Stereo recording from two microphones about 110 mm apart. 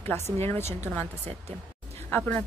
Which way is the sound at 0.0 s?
20° left (ahead or behind).